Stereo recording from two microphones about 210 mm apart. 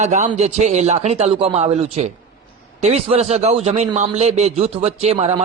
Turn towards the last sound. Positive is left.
turn(degrees=-30)  # may be behind; listen again after turning